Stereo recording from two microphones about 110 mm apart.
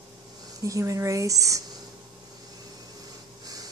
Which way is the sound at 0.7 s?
30° right (ahead or behind).